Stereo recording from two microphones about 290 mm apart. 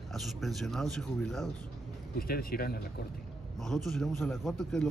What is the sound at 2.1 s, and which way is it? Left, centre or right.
Speech, left.